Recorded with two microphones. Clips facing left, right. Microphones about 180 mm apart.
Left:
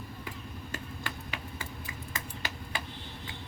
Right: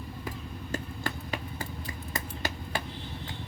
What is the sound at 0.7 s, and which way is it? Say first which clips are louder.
Tick-tock: right 7 dB; 40° right (ahead or behind).